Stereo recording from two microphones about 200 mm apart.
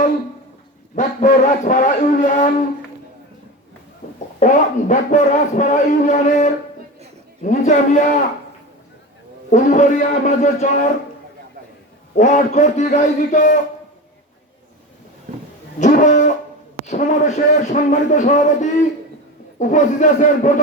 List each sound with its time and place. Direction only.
0.9 s a man's voice: 40° left (ahead or behind)
4.4 s a man's voice: 40° left (ahead or behind)
9.5 s a man's voice: 40° left (ahead or behind)
12.1 s a man's voice: 40° left (ahead or behind)
15.8 s a man's voice: 40° left (ahead or behind)